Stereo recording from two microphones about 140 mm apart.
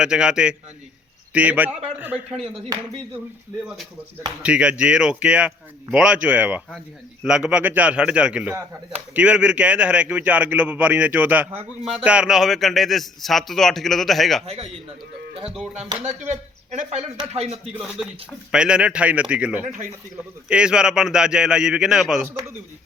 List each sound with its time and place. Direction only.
0.0 s a man's voice: 5° right (ahead or behind)
4.4 s a man's voice: 10° right (ahead or behind)
14.4 s a man's voice: 45° right (ahead or behind)
16.2 s a man's voice: 55° right (ahead or behind)
18.5 s a man's voice: 5° right (ahead or behind)
19.6 s a man's voice: 65° right (ahead or behind)
20.5 s a man's voice: 5° right (ahead or behind)